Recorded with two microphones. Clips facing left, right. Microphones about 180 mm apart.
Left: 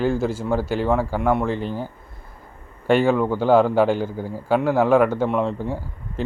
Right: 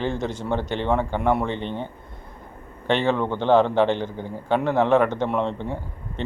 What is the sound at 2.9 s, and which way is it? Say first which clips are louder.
A man's voice: left 4 dB; 10° left (ahead or behind).